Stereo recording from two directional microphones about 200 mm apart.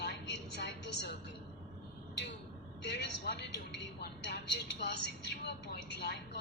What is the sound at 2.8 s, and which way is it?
A woman's voice, 60° left (ahead or behind).